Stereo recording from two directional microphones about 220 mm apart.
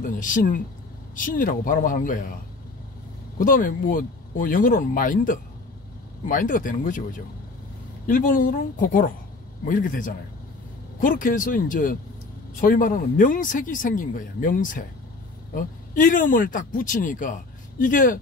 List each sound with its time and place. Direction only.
0.0 s speech: 40° left (ahead or behind)
3.3 s speech: 40° left (ahead or behind)